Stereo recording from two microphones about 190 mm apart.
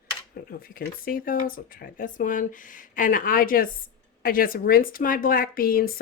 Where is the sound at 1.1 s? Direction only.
50° left (ahead or behind).